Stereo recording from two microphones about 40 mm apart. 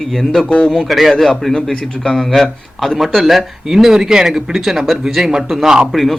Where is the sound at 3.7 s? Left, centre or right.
Centre.